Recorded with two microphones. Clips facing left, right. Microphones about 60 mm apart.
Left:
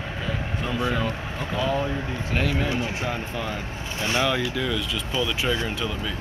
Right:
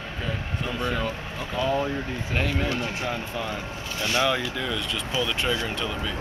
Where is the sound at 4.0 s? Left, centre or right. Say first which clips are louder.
Even; left.